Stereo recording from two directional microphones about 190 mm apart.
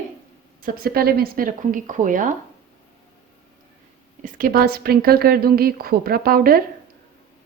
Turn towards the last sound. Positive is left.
turn(degrees=-50)  # may be behind; listen again after turning